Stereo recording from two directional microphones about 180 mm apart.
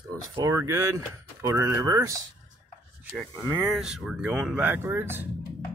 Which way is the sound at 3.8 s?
5° right (ahead or behind).